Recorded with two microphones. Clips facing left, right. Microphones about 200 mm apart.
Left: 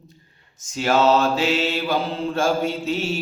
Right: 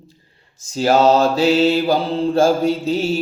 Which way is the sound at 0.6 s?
35° right (ahead or behind).